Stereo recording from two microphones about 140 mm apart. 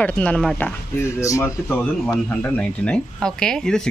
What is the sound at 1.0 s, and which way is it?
Speech, 20° left (ahead or behind).